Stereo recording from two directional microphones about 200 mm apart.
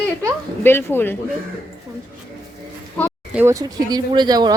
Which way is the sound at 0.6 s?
10° left (ahead or behind).